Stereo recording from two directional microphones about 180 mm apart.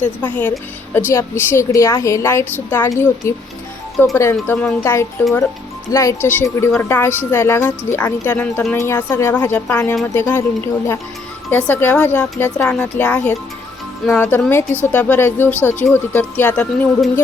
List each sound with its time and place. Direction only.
0.2 s speech: 10° left (ahead or behind)